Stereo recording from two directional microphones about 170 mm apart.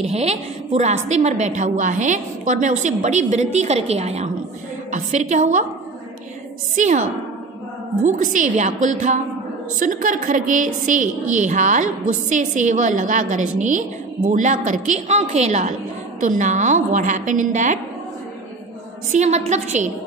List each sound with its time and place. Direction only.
0.0 s a woman's voice: 40° right (ahead or behind)
6.7 s a woman's voice: 45° right (ahead or behind)
19.1 s a woman's voice: 40° right (ahead or behind)